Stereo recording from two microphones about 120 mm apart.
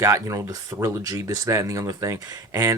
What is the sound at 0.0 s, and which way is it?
Speech, 25° right (ahead or behind).